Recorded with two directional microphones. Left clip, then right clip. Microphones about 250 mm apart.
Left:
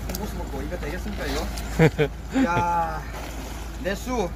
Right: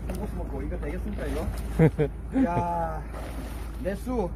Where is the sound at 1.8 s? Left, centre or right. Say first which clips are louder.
Left 4 dB; centre.